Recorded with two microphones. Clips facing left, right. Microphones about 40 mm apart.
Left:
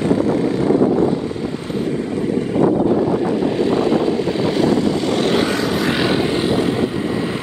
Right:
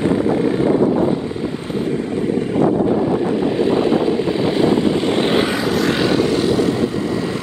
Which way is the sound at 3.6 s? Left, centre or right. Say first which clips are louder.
Right 1 dB; centre.